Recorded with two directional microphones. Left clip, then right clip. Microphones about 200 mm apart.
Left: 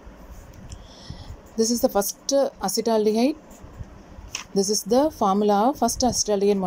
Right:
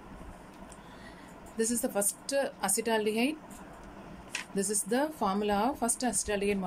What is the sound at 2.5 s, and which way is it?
Speech, 15° left (ahead or behind).